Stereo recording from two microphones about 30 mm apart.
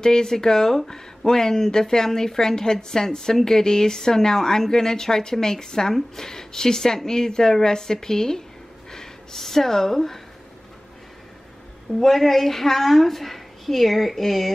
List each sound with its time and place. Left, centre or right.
0.0 s speech: left
12.0 s a woman's voice: centre